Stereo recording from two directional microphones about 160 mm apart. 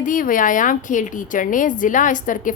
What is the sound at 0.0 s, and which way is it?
A woman's voice, 60° left (ahead or behind).